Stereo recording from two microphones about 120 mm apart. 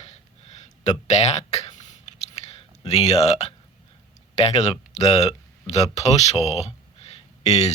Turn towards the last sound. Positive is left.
turn(degrees=65)  # may be behind; listen again after turning